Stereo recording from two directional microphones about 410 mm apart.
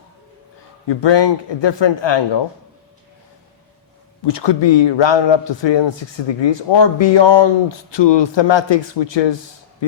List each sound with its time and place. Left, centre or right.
0.9 s a man's voice: left
4.2 s a man's voice: left